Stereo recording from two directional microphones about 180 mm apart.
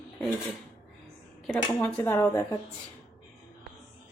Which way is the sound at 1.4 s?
5° left (ahead or behind).